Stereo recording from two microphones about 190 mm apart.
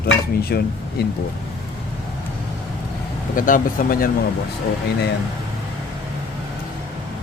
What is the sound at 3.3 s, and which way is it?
Speech, 45° left (ahead or behind).